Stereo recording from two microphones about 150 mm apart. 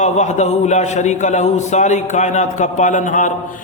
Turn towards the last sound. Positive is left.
turn(degrees=55)  # may be behind; listen again after turning